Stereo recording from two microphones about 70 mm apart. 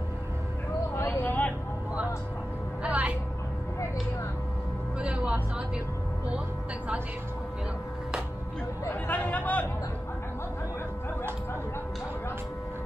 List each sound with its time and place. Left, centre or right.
0.9 s vehicle: left
2.8 s a sound: centre
4.9 s music: centre
9.0 s chatter: left